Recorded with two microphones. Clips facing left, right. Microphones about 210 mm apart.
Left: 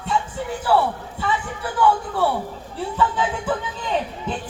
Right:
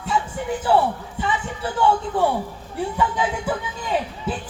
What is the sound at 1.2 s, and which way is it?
Speech, 15° right (ahead or behind).